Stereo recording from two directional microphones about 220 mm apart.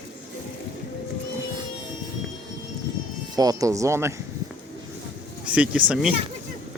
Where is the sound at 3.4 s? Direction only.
15° right (ahead or behind).